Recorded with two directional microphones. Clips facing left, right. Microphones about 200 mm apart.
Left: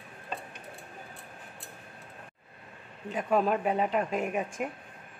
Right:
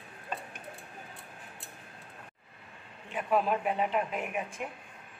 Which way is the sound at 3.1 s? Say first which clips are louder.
Left 2 dB; 40° left (ahead or behind).